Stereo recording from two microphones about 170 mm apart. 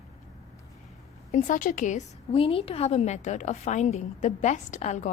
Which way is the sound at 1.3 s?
50° left (ahead or behind).